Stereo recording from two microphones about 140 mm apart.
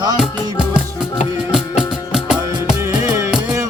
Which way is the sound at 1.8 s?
5° right (ahead or behind).